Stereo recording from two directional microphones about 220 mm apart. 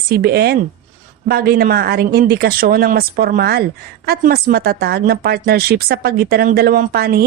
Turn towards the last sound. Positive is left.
turn(degrees=-45)  # may be behind; listen again after turning